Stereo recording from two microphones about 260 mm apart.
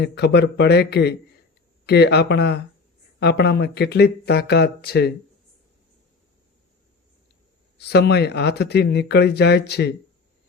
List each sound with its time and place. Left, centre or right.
0.0 s speech: left
7.8 s speech: left